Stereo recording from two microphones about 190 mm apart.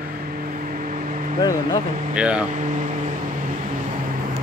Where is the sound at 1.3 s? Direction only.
20° left (ahead or behind).